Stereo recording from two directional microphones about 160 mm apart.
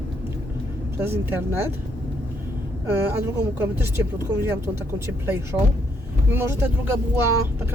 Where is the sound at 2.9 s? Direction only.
15° right (ahead or behind).